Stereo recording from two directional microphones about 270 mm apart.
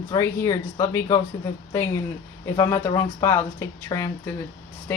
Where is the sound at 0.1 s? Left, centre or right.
Centre.